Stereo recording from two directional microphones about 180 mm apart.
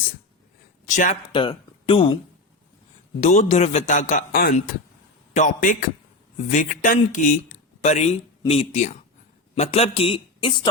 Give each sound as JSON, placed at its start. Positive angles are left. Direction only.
{"t": 0.9, "sound": "a sound", "side_deg": 45}
{"t": 1.3, "sound": "speech", "side_deg": 30}
{"t": 3.2, "sound": "a man's voice", "side_deg": 45}